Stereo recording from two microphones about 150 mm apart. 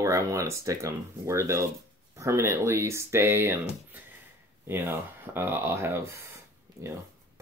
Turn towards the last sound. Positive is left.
turn(degrees=-20)  # may be behind; listen again after turning